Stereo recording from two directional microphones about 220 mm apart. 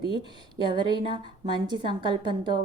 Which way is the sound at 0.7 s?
20° right (ahead or behind).